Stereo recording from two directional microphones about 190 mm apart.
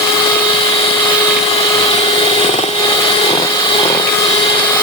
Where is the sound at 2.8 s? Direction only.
25° left (ahead or behind).